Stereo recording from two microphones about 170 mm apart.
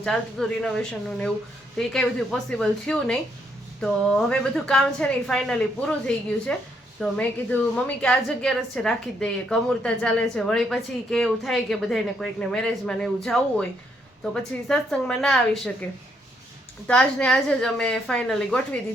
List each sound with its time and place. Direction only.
0.0 s a woman's voice: centre (ahead or behind)
16.8 s a woman's voice: 5° left (ahead or behind)